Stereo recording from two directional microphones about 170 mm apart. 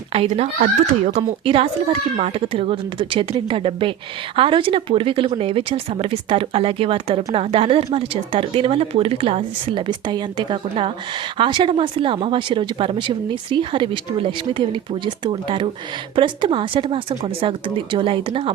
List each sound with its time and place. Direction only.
0.1 s speech: 35° right (ahead or behind)